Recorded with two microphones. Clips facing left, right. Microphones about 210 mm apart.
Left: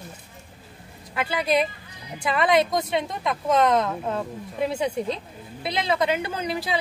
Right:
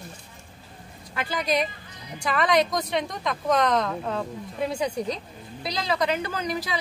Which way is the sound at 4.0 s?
15° left (ahead or behind).